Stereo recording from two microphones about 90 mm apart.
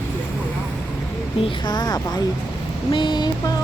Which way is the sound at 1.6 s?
50° left (ahead or behind).